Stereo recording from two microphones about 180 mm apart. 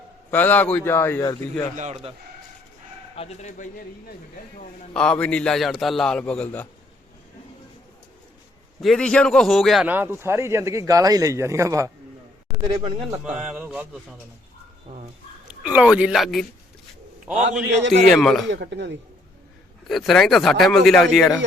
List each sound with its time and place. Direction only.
0.3 s a man's voice: 10° left (ahead or behind)
1.7 s a man's voice: 40° right (ahead or behind)
3.2 s speech: 40° left (ahead or behind)
4.9 s a man's voice: 5° left (ahead or behind)
8.8 s a man's voice: 5° left (ahead or behind)
9.8 s speech: 10° right (ahead or behind)
13.6 s speech: 5° right (ahead or behind)
15.6 s a man's voice: 5° right (ahead or behind)
18.1 s a man's voice: 5° left (ahead or behind)
18.4 s a man's voice: 75° right (ahead or behind)
19.9 s a man's voice: centre (ahead or behind)